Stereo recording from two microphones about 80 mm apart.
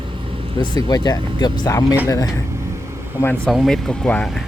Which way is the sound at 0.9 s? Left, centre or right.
Left.